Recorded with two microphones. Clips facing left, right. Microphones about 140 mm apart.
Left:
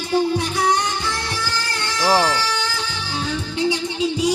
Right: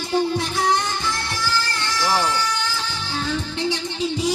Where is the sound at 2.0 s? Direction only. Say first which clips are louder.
Left 5 dB; 20° left (ahead or behind).